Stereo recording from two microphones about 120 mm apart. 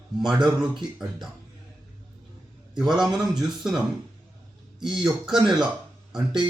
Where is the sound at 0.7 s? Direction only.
Centre (ahead or behind).